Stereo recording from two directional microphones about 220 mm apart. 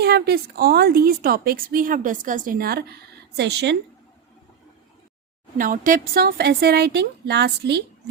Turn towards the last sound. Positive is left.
turn(degrees=-50)  # may be behind; listen again after turning